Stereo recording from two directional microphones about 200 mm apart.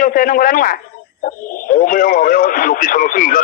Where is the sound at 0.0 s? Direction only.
45° left (ahead or behind).